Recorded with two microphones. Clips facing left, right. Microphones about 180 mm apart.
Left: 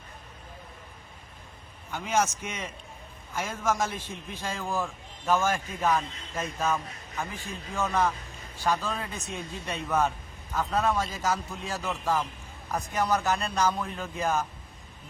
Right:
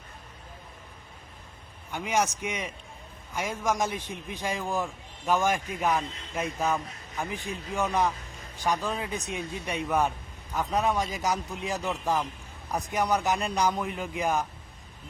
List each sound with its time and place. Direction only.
1.9 s a man's voice: 15° right (ahead or behind)